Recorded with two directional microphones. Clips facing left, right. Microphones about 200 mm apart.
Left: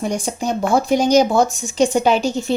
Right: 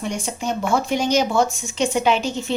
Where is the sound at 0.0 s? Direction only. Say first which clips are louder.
Left 4 dB; 40° left (ahead or behind).